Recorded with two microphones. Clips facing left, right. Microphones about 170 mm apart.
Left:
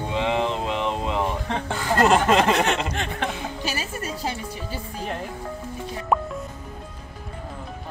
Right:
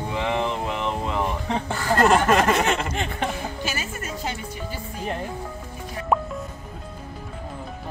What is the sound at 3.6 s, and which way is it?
Speech, 35° left (ahead or behind).